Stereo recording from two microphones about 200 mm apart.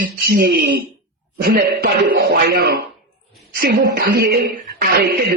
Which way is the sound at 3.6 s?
50° right (ahead or behind).